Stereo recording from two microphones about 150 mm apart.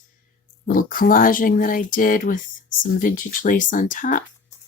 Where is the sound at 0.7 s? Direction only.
65° left (ahead or behind).